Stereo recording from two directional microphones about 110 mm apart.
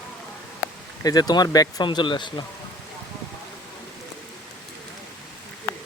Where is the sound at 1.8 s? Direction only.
45° left (ahead or behind).